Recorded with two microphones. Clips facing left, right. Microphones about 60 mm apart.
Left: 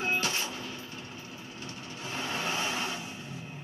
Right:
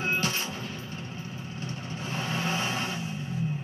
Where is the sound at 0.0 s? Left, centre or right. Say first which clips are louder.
Right 2 dB; right.